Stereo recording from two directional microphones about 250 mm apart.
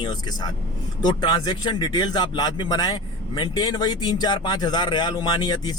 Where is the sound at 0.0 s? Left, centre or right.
Centre.